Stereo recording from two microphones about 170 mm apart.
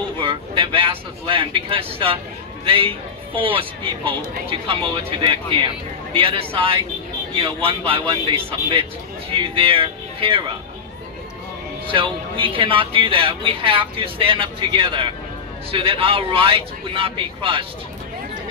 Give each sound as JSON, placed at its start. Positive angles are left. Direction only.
{"t": 0.2, "sound": "speech", "side_deg": -30}
{"t": 6.1, "sound": "speech", "side_deg": -30}
{"t": 11.9, "sound": "speech", "side_deg": -30}